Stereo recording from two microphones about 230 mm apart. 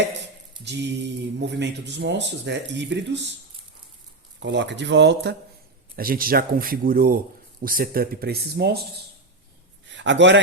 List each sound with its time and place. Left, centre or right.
0.6 s speech: right
4.4 s speech: right
9.9 s speech: right